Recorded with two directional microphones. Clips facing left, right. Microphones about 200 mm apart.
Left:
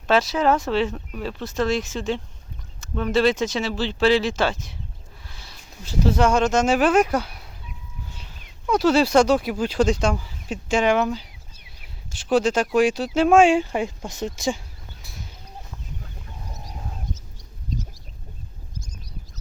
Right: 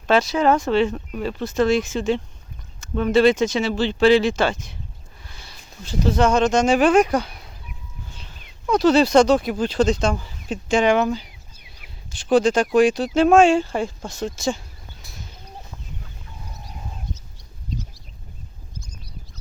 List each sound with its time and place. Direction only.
0.1 s speech: centre (ahead or behind)
17.7 s chicken: 45° left (ahead or behind)